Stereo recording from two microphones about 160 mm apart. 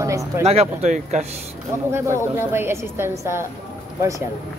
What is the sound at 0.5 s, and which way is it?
Speech, 45° right (ahead or behind).